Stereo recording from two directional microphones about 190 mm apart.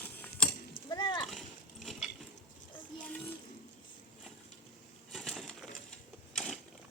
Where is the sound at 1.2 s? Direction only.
Centre (ahead or behind).